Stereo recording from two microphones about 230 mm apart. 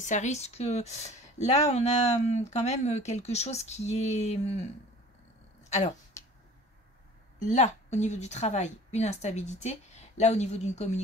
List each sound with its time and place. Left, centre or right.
0.0 s a woman's voice: left
5.7 s speech: left
7.3 s a woman's voice: left